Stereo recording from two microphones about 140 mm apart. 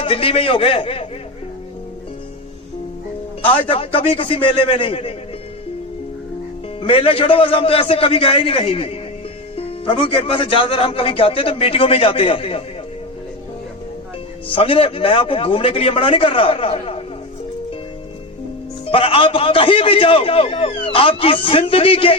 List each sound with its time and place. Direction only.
0.0 s a man's voice: 40° left (ahead or behind)
3.4 s a man's voice: 40° left (ahead or behind)
6.7 s a man's voice: 40° left (ahead or behind)
14.4 s a man's voice: 40° left (ahead or behind)
18.9 s a man's voice: 40° left (ahead or behind)